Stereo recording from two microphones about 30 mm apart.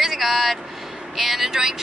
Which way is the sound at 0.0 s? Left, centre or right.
Centre.